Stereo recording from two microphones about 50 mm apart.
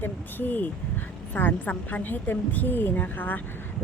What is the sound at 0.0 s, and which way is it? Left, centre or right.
Speech, left.